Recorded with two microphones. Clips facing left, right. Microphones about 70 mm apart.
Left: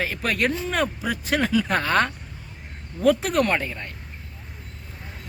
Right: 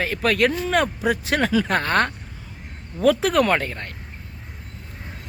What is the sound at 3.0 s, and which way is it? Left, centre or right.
Speech, right.